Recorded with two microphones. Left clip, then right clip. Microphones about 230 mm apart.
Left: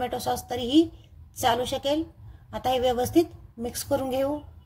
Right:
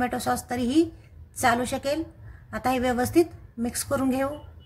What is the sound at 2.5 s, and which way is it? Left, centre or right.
Speech, left.